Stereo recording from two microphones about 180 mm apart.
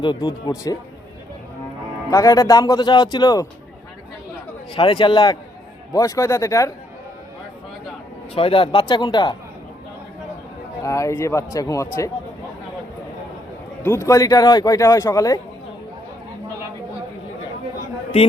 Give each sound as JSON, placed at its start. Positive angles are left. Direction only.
{"t": 0.0, "sound": "a man's voice", "side_deg": 25}
{"t": 2.0, "sound": "a man's voice", "side_deg": 20}
{"t": 4.7, "sound": "a man's voice", "side_deg": 25}
{"t": 8.4, "sound": "a man's voice", "side_deg": 30}
{"t": 10.8, "sound": "speech", "side_deg": 15}
{"t": 13.8, "sound": "a man's voice", "side_deg": 15}